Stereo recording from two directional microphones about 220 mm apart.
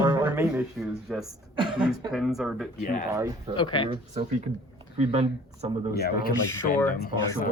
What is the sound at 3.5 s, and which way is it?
Speech, 20° left (ahead or behind).